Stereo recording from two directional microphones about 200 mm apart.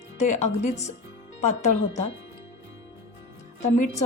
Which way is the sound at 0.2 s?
35° left (ahead or behind).